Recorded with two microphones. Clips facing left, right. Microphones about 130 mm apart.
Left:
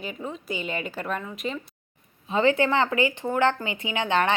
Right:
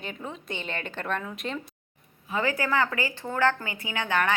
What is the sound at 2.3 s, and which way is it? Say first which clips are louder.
Speech: left 5 dB; 25° left (ahead or behind).